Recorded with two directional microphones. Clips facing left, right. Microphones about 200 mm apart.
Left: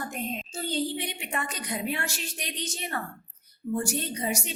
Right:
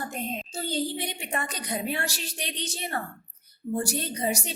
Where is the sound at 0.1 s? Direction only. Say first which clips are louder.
Right 1 dB; 40° right (ahead or behind).